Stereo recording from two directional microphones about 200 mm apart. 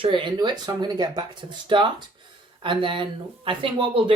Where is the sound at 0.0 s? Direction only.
25° right (ahead or behind).